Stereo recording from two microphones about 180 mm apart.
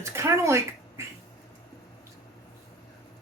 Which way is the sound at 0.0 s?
15° right (ahead or behind).